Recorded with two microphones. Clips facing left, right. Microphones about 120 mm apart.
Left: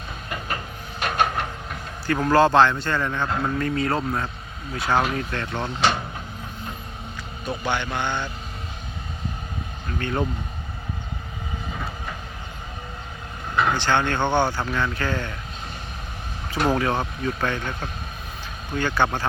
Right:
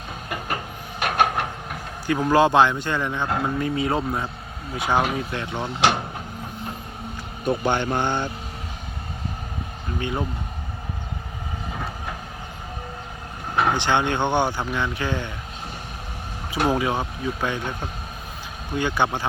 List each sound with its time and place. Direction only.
0.3 s train: 55° right (ahead or behind)
2.0 s speech: 15° right (ahead or behind)
7.4 s speech: 45° right (ahead or behind)
10.0 s speech: 10° right (ahead or behind)
13.6 s speech: 15° right (ahead or behind)
16.5 s speech: 10° right (ahead or behind)